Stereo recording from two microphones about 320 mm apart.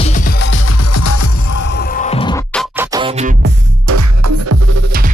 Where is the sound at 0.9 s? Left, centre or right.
Left.